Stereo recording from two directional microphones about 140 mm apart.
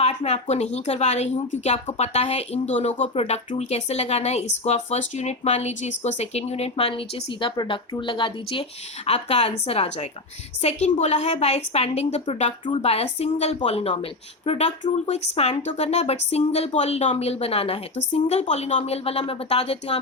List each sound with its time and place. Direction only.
0.0 s speech: 50° left (ahead or behind)
7.4 s speech: 35° left (ahead or behind)
9.0 s speech: 50° left (ahead or behind)
10.8 s speech: 60° left (ahead or behind)
12.6 s speech: 40° left (ahead or behind)